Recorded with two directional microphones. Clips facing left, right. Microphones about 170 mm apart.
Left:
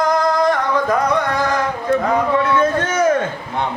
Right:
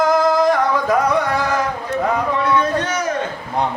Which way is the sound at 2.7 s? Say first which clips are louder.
Left 1 dB; 50° left (ahead or behind).